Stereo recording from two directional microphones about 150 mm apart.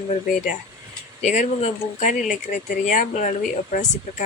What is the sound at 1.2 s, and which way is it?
Speech, 50° left (ahead or behind).